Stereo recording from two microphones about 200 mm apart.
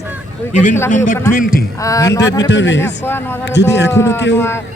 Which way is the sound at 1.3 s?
45° left (ahead or behind).